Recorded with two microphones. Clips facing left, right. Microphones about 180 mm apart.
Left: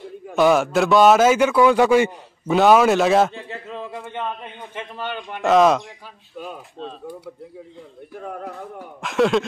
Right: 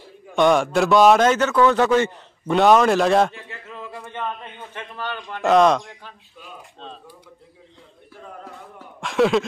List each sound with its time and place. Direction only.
0.3 s a man's voice: 5° left (ahead or behind)
3.3 s a sound: 30° left (ahead or behind)
4.0 s a man's voice: 15° left (ahead or behind)
5.4 s a man's voice: centre (ahead or behind)
9.0 s a man's voice: centre (ahead or behind)